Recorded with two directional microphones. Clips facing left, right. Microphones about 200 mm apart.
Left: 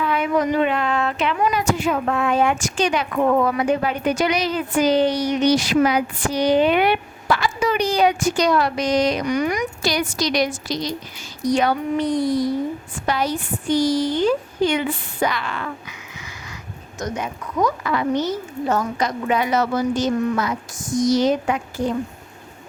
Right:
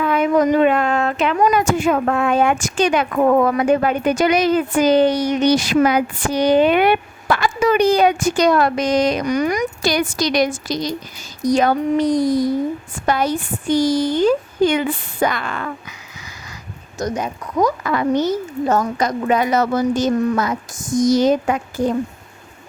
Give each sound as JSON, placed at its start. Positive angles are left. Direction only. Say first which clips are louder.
{"t": 0.0, "sound": "speech", "louder": "right 4 dB", "side_deg": -45}
{"t": 17.0, "sound": "speech", "louder": "right 4 dB", "side_deg": -35}